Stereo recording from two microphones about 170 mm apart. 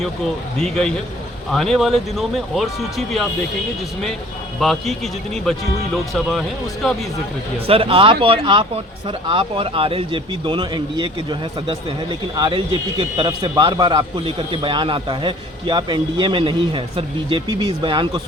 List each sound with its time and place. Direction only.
0.6 s speech: 5° left (ahead or behind)
4.6 s speech: centre (ahead or behind)
7.7 s a man's voice: 35° right (ahead or behind)